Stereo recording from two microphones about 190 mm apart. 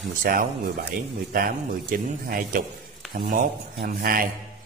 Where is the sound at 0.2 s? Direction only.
45° right (ahead or behind).